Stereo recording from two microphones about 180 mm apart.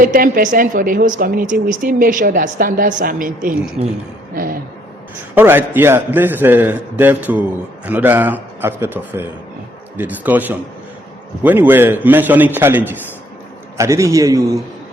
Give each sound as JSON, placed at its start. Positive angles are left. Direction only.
{"t": 0.0, "sound": "a woman's voice", "side_deg": -50}
{"t": 3.8, "sound": "a woman's voice", "side_deg": -40}
{"t": 5.3, "sound": "a man's voice", "side_deg": -10}